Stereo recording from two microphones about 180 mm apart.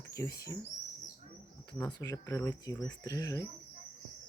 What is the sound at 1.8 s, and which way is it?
Speech, 20° left (ahead or behind).